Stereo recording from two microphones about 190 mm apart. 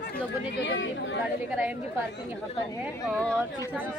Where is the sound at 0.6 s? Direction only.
75° left (ahead or behind).